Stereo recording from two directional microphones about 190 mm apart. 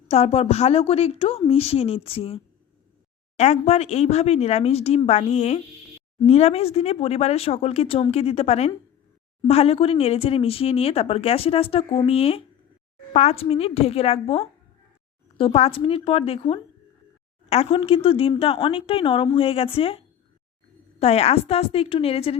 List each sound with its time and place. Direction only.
0.1 s speech: 30° left (ahead or behind)
21.0 s speech: 35° left (ahead or behind)